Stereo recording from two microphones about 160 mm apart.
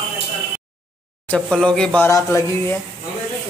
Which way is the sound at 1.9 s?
15° left (ahead or behind).